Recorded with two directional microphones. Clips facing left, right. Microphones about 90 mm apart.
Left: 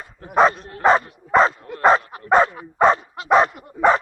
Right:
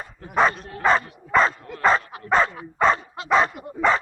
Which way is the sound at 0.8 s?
20° left (ahead or behind).